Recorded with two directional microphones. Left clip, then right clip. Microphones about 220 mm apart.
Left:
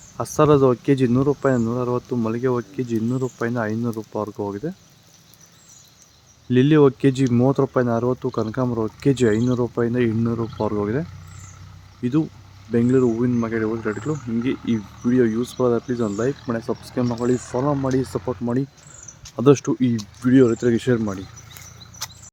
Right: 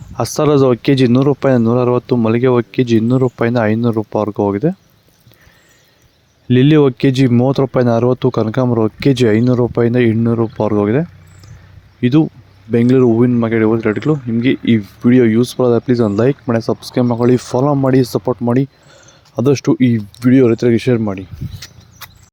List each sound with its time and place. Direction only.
0.2 s speech: 35° right (ahead or behind)
6.5 s speech: 35° right (ahead or behind)
12.0 s speech: 30° right (ahead or behind)
22.0 s horse: 25° right (ahead or behind)